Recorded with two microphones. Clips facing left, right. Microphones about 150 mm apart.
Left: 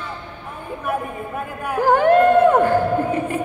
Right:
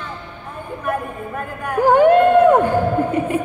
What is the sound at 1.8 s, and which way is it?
Speech, 15° right (ahead or behind).